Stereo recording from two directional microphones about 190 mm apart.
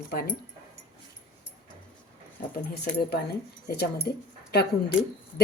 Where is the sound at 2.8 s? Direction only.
55° left (ahead or behind).